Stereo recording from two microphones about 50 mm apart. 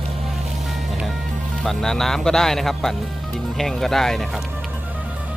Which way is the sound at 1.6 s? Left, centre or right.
Centre.